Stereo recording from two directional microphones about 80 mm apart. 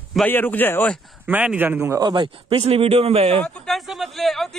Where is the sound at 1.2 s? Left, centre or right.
Centre.